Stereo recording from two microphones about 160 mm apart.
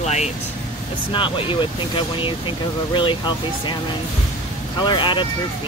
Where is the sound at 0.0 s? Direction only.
45° left (ahead or behind).